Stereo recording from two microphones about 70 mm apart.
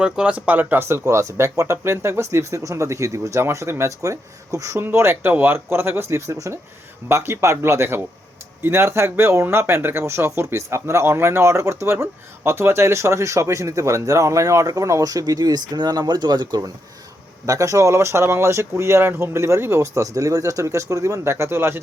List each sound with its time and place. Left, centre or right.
0.0 s speech: centre; by 4.8 s right
4.8 s speech: right
17.4 s speech: right